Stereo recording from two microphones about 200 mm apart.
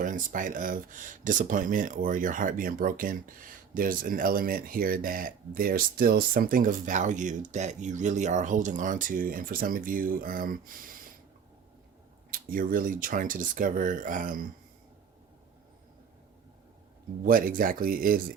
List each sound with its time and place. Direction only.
0.0 s speech: 40° right (ahead or behind)
12.3 s speech: 45° right (ahead or behind)
17.2 s speech: 45° right (ahead or behind)